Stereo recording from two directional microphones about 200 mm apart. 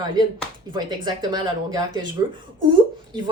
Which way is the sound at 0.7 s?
20° right (ahead or behind).